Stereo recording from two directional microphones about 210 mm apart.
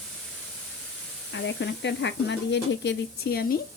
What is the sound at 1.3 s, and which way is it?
Speech, 55° left (ahead or behind).